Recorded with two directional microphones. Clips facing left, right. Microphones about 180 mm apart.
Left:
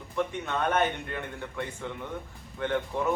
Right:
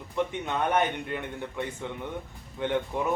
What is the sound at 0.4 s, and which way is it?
Speech, 15° right (ahead or behind).